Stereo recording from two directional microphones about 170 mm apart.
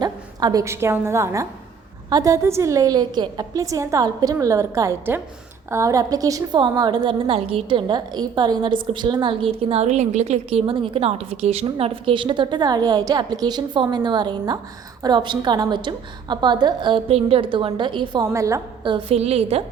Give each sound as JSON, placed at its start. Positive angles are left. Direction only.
{"t": 0.0, "sound": "a woman's voice", "side_deg": -25}
{"t": 18.8, "sound": "a woman's voice", "side_deg": -30}